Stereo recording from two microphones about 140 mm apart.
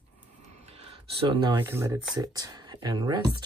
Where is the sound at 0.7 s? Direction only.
45° right (ahead or behind).